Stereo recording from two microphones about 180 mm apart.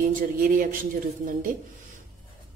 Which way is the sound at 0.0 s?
50° right (ahead or behind).